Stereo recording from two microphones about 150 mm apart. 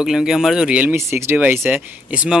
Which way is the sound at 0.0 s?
5° right (ahead or behind).